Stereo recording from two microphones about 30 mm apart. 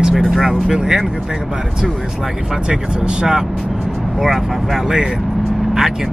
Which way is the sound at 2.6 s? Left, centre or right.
Right.